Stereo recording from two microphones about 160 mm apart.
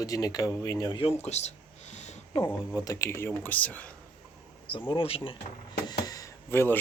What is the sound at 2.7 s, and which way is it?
Speech, 20° left (ahead or behind).